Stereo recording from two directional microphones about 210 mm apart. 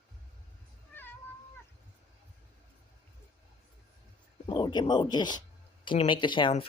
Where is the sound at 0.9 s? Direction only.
10° left (ahead or behind).